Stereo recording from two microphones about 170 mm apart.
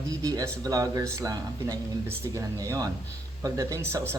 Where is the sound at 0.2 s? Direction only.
20° right (ahead or behind).